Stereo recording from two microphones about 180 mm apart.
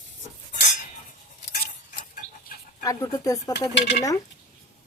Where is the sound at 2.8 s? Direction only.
20° left (ahead or behind).